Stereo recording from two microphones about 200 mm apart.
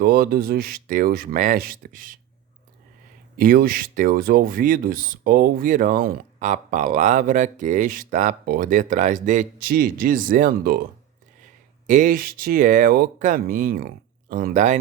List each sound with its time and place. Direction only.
0.0 s speech: 50° right (ahead or behind)
3.3 s speech: 45° right (ahead or behind)
11.9 s speech: 40° right (ahead or behind)